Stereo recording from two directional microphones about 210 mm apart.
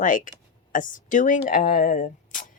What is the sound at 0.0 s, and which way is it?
Speech, 40° left (ahead or behind).